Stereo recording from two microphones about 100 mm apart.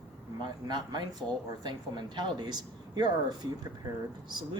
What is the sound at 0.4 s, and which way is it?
Speech, 45° right (ahead or behind).